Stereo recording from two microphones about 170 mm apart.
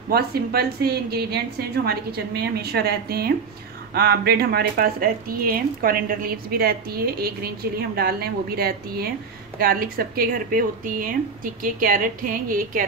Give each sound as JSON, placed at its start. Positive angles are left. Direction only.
{"t": 0.1, "sound": "a woman's voice", "side_deg": -65}